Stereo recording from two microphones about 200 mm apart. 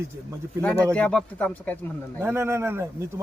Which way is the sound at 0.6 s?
5° left (ahead or behind).